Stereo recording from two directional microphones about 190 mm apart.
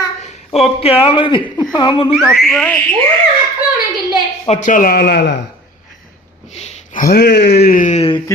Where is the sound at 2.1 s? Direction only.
Centre (ahead or behind).